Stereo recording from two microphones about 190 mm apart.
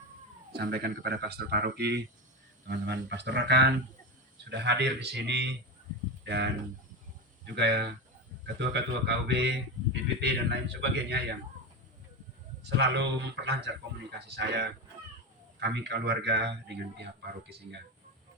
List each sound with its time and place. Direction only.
0.5 s speech: 55° right (ahead or behind)
12.6 s speech: 65° right (ahead or behind)